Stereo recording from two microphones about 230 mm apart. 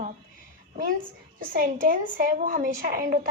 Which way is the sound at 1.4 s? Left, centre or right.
Right.